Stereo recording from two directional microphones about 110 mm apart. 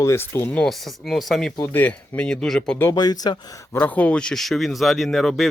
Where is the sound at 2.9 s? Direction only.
35° left (ahead or behind).